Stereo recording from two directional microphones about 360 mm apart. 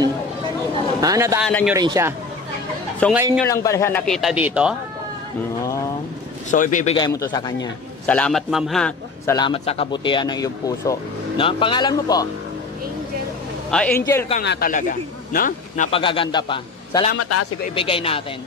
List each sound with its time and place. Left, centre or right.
1.0 s a man's voice: centre
1.5 s a man's voice: centre
1.8 s a man's voice: centre
3.4 s a man's voice: centre
6.5 s a man's voice: left
13.7 s a man's voice: centre
14.3 s a man's voice: left
17.2 s a man's voice: left
17.7 s a man's voice: centre